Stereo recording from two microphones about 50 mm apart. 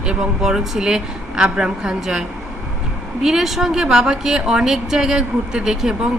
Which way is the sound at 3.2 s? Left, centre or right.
Centre.